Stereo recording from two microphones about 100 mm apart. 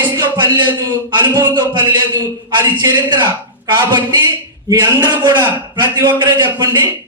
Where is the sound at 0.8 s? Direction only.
45° right (ahead or behind).